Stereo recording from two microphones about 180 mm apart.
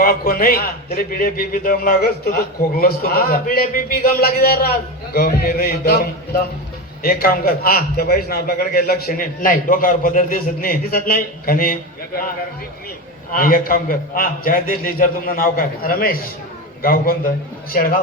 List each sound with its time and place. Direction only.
0.0 s a man's voice: 55° left (ahead or behind)
13.3 s a man's voice: 50° left (ahead or behind)